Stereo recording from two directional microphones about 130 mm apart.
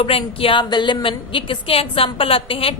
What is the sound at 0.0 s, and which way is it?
A woman's voice, 45° left (ahead or behind).